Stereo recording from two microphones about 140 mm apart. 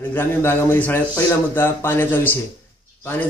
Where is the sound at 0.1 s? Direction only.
15° left (ahead or behind).